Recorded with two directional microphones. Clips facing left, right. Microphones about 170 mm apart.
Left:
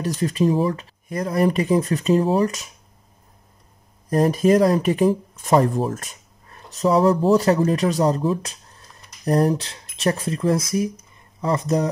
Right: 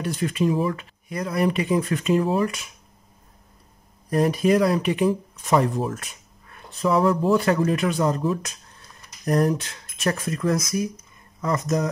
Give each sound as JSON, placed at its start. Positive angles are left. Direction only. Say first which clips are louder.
{"t": 0.0, "sound": "speech", "louder": "left 3 dB", "side_deg": 40}
{"t": 4.1, "sound": "speech", "louder": "left 3 dB", "side_deg": 40}